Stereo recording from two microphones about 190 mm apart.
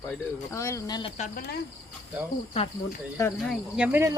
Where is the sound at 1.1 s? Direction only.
40° left (ahead or behind).